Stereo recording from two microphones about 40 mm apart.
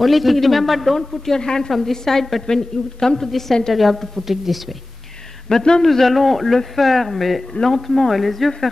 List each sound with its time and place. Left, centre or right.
0.0 s a man's voice: centre
1.7 s a man's voice: centre
5.5 s a man's voice: left
5.8 s a man's voice: centre